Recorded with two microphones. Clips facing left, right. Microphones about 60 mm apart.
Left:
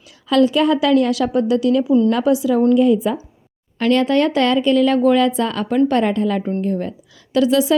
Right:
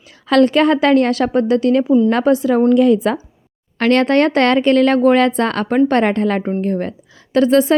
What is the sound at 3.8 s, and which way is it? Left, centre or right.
A woman's voice, right.